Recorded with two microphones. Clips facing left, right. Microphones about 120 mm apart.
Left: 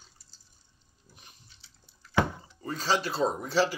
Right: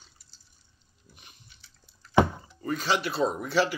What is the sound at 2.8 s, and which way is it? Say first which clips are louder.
Speech: left 1 dB; 35° left (ahead or behind).